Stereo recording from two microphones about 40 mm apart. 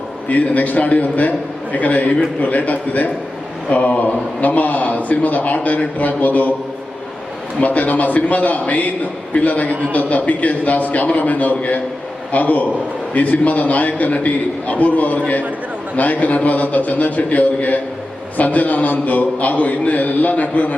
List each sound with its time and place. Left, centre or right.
0.3 s a man's voice: left
7.6 s a man's voice: left